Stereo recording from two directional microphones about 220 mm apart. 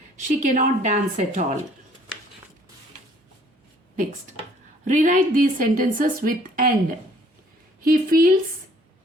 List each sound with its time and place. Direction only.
0.3 s a woman's voice: 35° right (ahead or behind)
4.9 s a woman's voice: 35° right (ahead or behind)